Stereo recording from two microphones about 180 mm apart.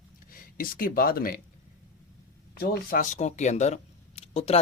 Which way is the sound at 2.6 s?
50° left (ahead or behind).